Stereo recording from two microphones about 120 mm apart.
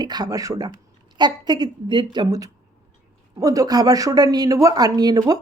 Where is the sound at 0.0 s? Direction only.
35° right (ahead or behind).